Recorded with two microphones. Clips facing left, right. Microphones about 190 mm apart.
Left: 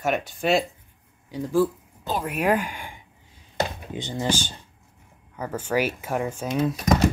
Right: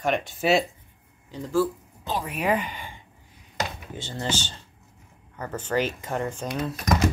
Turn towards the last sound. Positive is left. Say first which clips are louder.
# left 5 dB
turn(degrees=10)  # may be behind; listen again after turning